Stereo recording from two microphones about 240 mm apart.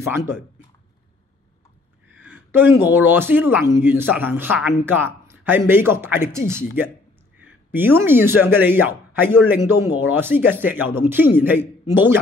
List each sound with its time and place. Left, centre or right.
2.2 s speech: centre